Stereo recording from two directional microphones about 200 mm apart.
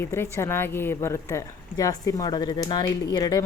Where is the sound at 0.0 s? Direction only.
10° left (ahead or behind).